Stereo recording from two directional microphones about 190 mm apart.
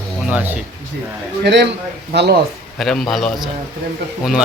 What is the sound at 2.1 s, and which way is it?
Speech, 65° right (ahead or behind).